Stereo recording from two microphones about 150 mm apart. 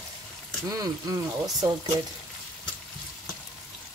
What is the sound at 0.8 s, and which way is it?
Speech, 25° right (ahead or behind).